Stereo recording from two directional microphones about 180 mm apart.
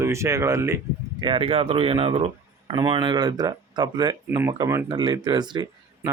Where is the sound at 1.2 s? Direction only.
30° right (ahead or behind).